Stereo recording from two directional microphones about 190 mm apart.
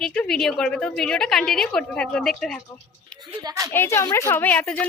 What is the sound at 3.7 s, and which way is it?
Speech, 10° left (ahead or behind).